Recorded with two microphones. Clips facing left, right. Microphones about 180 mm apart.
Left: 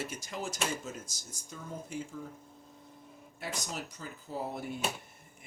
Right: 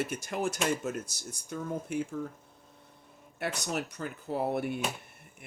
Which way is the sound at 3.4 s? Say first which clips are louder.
Right 6 dB; 65° right (ahead or behind).